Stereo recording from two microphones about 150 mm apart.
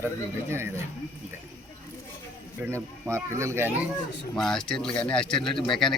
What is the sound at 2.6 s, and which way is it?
Speech, 20° right (ahead or behind).